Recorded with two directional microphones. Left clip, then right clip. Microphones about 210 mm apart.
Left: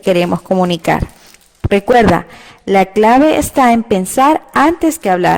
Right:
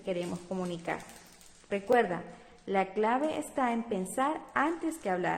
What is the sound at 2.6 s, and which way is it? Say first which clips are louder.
A woman's voice: left 19 dB; 50° left (ahead or behind).